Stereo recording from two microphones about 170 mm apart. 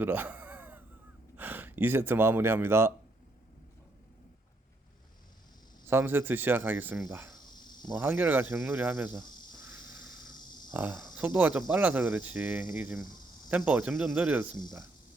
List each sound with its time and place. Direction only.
0.0 s a sound: 10° right (ahead or behind)
1.4 s speech: 10° right (ahead or behind)
5.9 s speech: 15° right (ahead or behind)
7.1 s insect: 15° right (ahead or behind)
7.9 s speech: 15° right (ahead or behind)
10.9 s speech: centre (ahead or behind)